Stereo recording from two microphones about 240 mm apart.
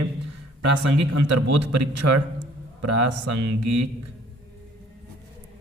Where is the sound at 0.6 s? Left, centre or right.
Right.